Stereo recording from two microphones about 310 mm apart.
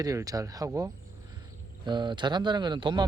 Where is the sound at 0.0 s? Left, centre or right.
Centre.